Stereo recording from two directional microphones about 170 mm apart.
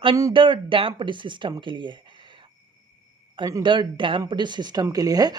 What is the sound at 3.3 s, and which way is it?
Speech, 25° right (ahead or behind).